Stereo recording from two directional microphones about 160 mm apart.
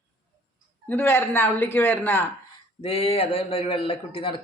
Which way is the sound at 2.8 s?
35° left (ahead or behind).